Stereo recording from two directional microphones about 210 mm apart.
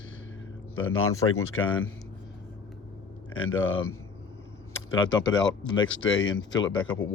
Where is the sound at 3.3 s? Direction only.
80° left.